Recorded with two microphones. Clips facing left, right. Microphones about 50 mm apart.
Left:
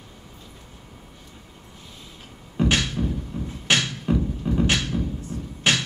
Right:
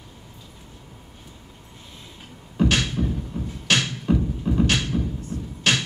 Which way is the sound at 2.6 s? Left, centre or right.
Centre.